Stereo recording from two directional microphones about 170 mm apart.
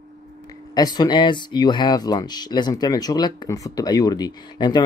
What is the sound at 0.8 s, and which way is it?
Speech, 25° left (ahead or behind).